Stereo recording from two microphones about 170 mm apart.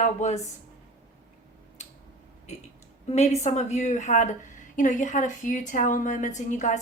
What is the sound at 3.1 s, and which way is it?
Speech, 40° left (ahead or behind).